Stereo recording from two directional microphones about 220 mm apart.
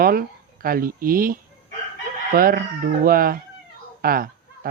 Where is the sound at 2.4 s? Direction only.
40° right (ahead or behind).